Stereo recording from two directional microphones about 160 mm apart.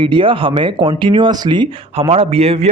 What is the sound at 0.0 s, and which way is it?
Speech, 30° right (ahead or behind).